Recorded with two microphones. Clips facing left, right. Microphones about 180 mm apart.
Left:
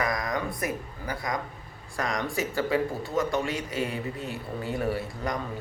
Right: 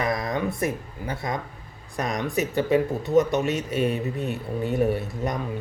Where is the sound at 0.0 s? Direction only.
25° right (ahead or behind).